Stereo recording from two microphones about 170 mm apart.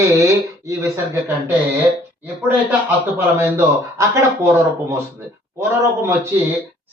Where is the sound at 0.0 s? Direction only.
15° right (ahead or behind).